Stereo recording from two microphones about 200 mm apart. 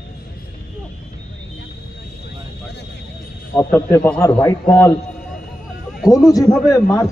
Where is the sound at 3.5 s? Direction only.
10° left (ahead or behind).